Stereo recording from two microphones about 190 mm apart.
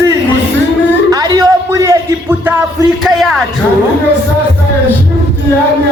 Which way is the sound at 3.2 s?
Centre (ahead or behind).